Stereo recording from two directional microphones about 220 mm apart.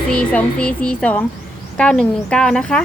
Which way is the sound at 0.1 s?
5° left (ahead or behind).